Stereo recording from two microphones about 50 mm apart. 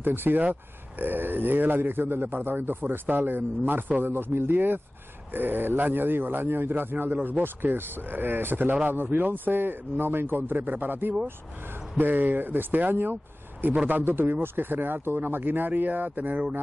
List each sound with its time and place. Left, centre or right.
0.0 s speech: right
4.6 s speech: right